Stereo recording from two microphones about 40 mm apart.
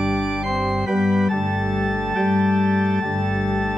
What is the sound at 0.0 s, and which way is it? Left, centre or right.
Organ, centre.